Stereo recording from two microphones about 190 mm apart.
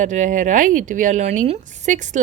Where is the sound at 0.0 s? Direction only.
40° right (ahead or behind).